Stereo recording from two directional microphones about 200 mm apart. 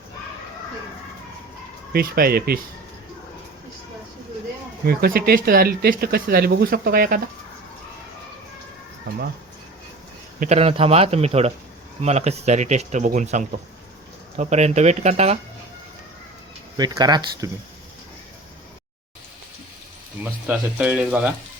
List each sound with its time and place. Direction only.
1.9 s speech: 50° right (ahead or behind)
4.9 s speech: 50° right (ahead or behind)
10.4 s speech: 30° right (ahead or behind)
16.7 s speech: 20° right (ahead or behind)
20.2 s speech: 5° right (ahead or behind)